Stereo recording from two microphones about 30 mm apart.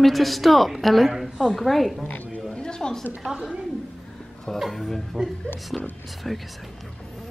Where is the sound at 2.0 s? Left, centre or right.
Left.